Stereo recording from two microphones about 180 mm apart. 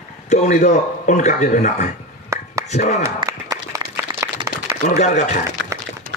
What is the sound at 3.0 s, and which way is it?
Applause, 20° right (ahead or behind).